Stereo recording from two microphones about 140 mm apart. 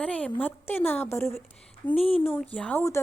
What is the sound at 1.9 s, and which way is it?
Speech, 45° left (ahead or behind).